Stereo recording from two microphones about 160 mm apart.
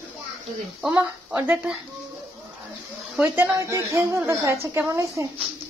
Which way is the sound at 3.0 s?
10° right (ahead or behind).